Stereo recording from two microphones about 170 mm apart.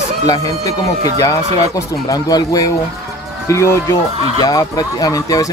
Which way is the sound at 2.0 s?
20° left (ahead or behind).